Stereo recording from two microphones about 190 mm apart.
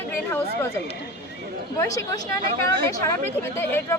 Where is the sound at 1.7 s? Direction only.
15° left (ahead or behind).